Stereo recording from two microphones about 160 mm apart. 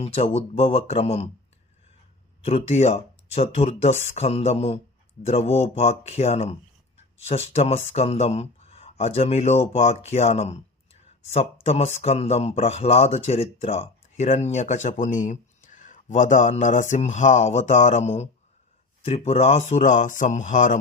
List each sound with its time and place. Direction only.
0.0 s speech: 40° left (ahead or behind)
2.4 s speech: 40° left (ahead or behind)